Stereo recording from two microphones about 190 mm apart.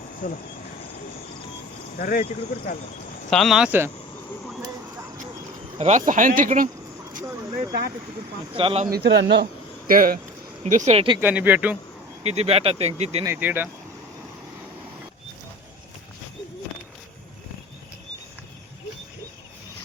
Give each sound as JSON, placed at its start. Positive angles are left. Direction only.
{"t": 0.2, "sound": "speech", "side_deg": 40}
{"t": 2.0, "sound": "speech", "side_deg": 45}
{"t": 3.2, "sound": "speech", "side_deg": 0}
{"t": 5.7, "sound": "speech", "side_deg": -35}
{"t": 8.5, "sound": "speech", "side_deg": -30}
{"t": 8.9, "sound": "speech", "side_deg": -65}
{"t": 10.6, "sound": "speech", "side_deg": -40}
{"t": 11.2, "sound": "speech", "side_deg": -10}
{"t": 12.2, "sound": "speech", "side_deg": -30}
{"t": 13.2, "sound": "speech", "side_deg": -10}